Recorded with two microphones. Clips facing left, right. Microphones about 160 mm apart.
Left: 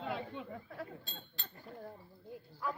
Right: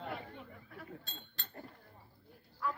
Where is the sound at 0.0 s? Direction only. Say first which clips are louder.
Left 4 dB; 90° left.